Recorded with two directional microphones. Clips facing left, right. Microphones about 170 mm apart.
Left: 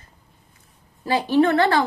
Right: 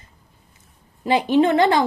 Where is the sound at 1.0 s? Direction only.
20° right (ahead or behind).